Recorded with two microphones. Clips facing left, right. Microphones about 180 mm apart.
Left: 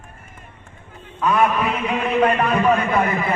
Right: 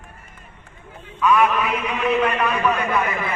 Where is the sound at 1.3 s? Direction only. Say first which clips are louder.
Even; 55° left (ahead or behind).